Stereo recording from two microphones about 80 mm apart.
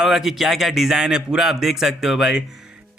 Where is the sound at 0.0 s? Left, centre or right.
Centre.